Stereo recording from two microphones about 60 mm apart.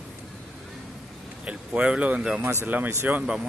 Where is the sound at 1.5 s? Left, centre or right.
Centre.